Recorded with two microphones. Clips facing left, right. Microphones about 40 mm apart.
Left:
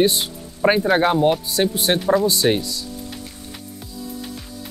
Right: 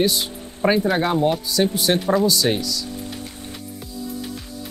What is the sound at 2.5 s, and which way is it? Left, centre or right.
Speech, left.